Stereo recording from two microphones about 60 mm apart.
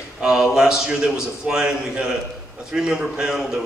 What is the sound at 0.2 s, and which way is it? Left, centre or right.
A man's voice, centre.